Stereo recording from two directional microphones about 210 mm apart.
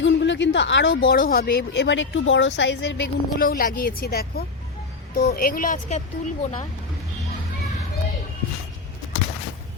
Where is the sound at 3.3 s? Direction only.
40° left (ahead or behind).